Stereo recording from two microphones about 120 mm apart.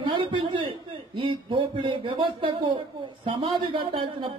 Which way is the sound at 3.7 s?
50° right (ahead or behind).